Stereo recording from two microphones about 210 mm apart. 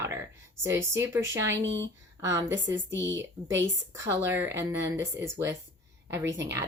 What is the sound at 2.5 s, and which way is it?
Speech, 60° right (ahead or behind).